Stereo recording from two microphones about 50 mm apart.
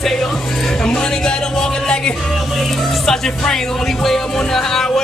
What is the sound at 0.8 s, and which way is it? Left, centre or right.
Speech, centre.